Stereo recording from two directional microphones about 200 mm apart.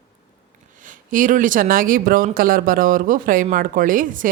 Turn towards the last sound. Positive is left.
turn(degrees=-40)  # may be behind; listen again after turning